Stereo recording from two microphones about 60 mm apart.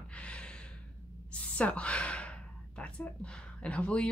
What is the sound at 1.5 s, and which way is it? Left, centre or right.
Speech, left.